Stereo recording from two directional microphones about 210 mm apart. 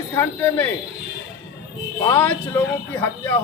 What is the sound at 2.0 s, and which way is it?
Speech, 10° left (ahead or behind).